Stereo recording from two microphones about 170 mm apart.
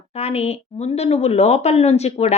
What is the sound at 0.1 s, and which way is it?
A woman's voice, 40° left (ahead or behind).